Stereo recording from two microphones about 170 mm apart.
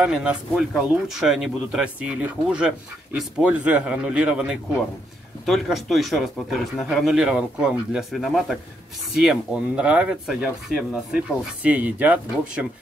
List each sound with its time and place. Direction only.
0.0 s speech: 5° right (ahead or behind)